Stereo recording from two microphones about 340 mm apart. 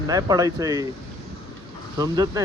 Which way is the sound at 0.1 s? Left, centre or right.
Centre.